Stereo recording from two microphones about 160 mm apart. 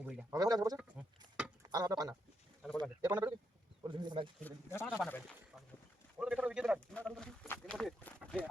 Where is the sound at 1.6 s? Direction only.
25° right (ahead or behind).